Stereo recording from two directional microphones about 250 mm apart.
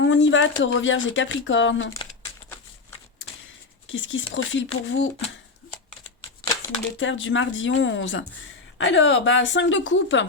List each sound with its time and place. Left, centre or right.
0.0 s speech: left
3.8 s speech: left
6.4 s a sound: centre
7.0 s speech: left